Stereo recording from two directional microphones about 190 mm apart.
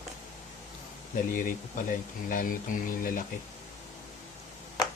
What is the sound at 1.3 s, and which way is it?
Speech, 45° left (ahead or behind).